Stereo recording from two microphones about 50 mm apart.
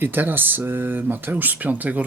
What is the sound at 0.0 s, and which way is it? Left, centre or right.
Speech, right.